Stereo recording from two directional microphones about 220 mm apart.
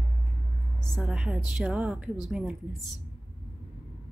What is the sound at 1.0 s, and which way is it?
Speech, 5° right (ahead or behind).